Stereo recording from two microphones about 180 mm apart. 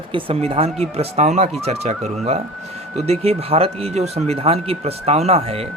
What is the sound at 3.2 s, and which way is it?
Speech, 35° right (ahead or behind).